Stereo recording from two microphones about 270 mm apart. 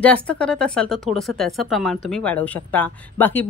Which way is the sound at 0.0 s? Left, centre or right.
Centre.